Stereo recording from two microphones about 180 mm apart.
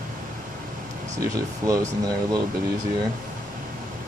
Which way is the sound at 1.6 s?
20° right (ahead or behind).